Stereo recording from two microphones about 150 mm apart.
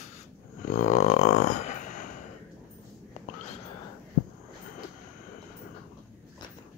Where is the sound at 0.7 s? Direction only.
55° left (ahead or behind).